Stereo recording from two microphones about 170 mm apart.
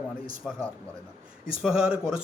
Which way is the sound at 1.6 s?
5° right (ahead or behind).